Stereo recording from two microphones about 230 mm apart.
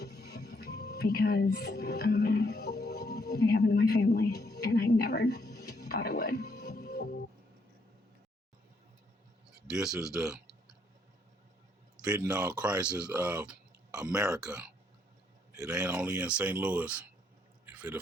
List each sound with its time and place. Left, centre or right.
0.0 s music: left
9.6 s speech: centre
11.9 s speech: centre
17.7 s a sound: centre